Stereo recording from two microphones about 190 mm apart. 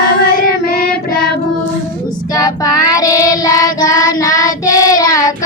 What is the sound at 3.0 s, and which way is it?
Child singing, 20° left (ahead or behind).